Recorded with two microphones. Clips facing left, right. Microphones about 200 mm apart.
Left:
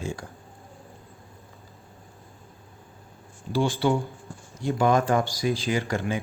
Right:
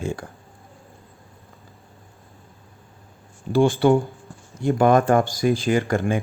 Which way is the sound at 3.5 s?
55° right (ahead or behind).